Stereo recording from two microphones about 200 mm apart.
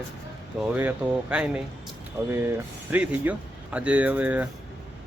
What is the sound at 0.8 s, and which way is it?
Speech, 5° right (ahead or behind).